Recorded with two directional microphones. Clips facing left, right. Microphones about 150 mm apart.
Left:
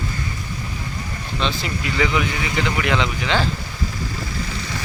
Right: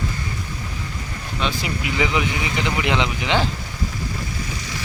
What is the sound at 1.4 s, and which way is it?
Speech, 15° right (ahead or behind).